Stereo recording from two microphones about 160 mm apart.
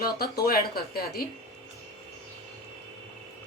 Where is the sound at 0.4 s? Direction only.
70° left (ahead or behind).